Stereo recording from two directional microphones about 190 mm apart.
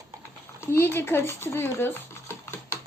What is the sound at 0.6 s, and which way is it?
Speech, 10° left (ahead or behind).